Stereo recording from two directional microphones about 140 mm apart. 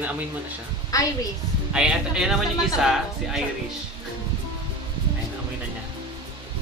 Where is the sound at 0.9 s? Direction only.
25° left (ahead or behind).